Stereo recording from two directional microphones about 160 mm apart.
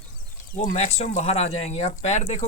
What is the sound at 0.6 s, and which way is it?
Speech, 45° left (ahead or behind).